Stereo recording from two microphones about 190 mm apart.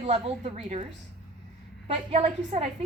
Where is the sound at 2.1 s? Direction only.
35° right (ahead or behind).